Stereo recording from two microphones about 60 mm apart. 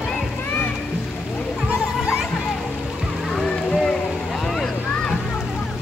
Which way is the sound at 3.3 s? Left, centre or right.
Centre.